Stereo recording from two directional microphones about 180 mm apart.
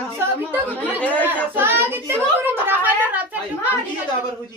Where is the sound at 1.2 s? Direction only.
10° right (ahead or behind).